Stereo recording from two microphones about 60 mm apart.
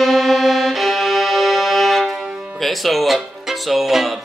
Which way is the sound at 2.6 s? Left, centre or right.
Centre.